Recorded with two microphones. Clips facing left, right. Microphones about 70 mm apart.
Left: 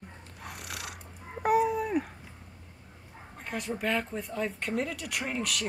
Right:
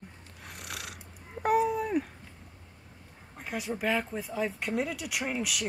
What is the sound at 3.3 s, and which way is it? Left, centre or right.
Speech, centre.